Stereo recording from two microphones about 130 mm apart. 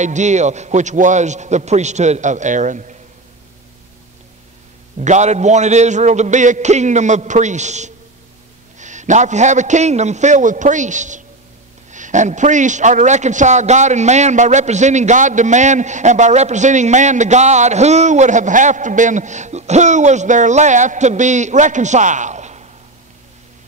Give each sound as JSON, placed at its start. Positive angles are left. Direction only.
{"t": 0.0, "sound": "a man's voice", "side_deg": -65}
{"t": 4.9, "sound": "a man's voice", "side_deg": -65}